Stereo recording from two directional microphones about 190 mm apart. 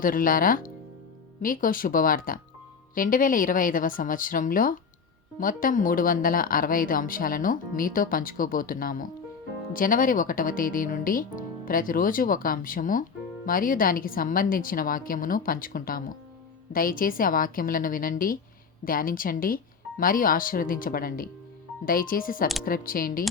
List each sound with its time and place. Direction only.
0.0 s speech: 45° left (ahead or behind)